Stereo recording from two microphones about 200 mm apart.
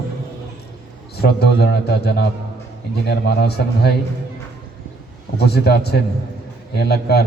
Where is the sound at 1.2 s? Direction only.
55° left (ahead or behind).